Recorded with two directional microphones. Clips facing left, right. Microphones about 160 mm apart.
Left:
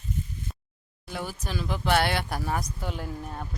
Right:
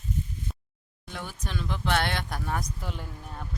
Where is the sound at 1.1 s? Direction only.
5° left (ahead or behind).